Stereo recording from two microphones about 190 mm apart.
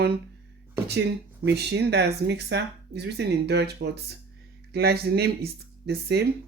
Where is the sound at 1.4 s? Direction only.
60° right (ahead or behind).